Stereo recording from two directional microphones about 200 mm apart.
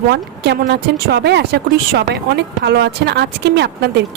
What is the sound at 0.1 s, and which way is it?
Speech, 55° right (ahead or behind).